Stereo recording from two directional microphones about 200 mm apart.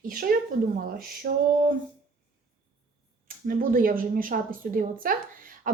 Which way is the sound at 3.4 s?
45° right (ahead or behind).